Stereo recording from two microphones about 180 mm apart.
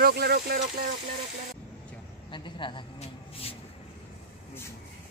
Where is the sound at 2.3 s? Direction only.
25° left (ahead or behind).